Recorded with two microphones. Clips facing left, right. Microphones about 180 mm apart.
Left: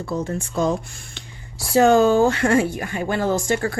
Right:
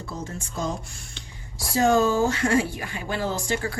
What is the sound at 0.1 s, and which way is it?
Speech, 65° left (ahead or behind).